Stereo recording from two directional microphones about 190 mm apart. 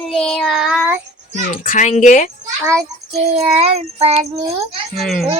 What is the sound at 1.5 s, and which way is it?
Speech, 45° left (ahead or behind).